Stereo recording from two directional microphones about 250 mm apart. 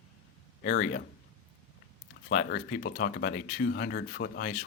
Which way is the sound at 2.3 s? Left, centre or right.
Left.